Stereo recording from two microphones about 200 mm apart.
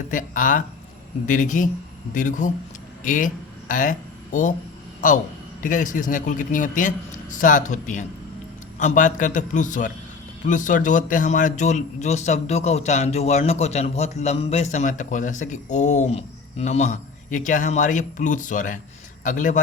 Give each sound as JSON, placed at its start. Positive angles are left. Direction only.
{"t": 0.1, "sound": "a man's voice", "side_deg": 40}